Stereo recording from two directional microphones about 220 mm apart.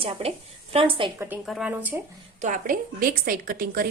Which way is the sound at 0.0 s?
25° right (ahead or behind).